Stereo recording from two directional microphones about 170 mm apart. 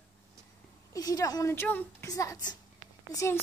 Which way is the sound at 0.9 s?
20° left (ahead or behind).